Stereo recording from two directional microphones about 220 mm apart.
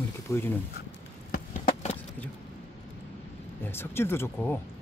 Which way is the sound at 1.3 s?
35° left (ahead or behind).